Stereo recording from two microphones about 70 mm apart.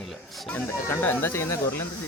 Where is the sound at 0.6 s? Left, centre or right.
Left.